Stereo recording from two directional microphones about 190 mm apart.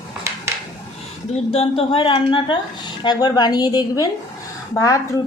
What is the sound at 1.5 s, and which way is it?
A woman's voice, 30° left (ahead or behind).